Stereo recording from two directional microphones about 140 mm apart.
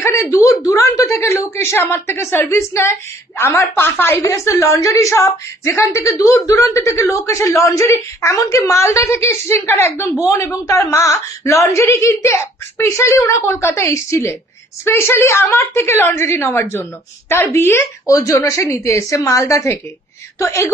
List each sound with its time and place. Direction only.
0.0 s a woman's voice: 20° left (ahead or behind)